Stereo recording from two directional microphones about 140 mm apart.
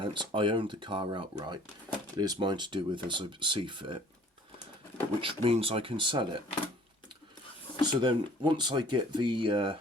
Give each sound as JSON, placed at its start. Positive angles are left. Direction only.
{"t": 0.0, "sound": "speech", "side_deg": -35}
{"t": 5.2, "sound": "speech", "side_deg": -40}
{"t": 7.9, "sound": "speech", "side_deg": -35}